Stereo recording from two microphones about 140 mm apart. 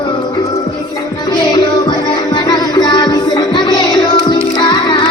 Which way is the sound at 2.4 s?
30° left (ahead or behind).